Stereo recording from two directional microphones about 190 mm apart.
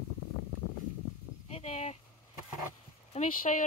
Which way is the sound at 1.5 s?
35° left (ahead or behind).